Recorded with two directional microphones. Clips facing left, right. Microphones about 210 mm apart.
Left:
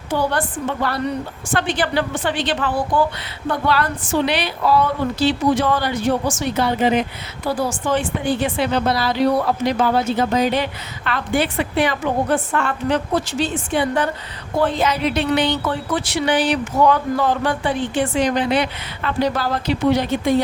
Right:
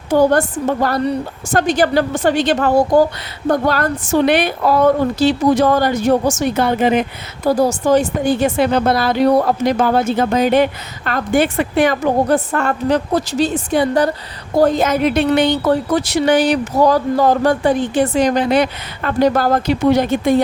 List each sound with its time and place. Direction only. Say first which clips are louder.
0.1 s a woman's voice: right 8 dB; 45° right (ahead or behind)
7.4 s a woman's voice: right 7 dB; 40° right (ahead or behind)